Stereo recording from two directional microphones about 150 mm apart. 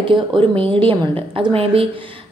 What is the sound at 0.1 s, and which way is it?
A woman's voice, 35° right (ahead or behind).